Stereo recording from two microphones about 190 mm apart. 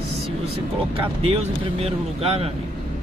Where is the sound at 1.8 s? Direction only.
30° right (ahead or behind).